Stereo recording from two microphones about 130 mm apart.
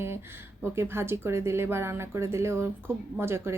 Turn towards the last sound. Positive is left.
turn(degrees=-20)  # may be behind; listen again after turning